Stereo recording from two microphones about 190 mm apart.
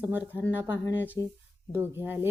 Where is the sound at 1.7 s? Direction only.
10° right (ahead or behind).